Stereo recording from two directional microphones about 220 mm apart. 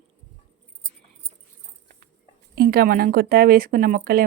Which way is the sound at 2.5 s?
45° right (ahead or behind).